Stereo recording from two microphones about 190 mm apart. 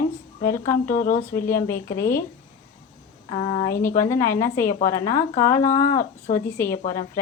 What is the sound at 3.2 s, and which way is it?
Speech, 30° left (ahead or behind).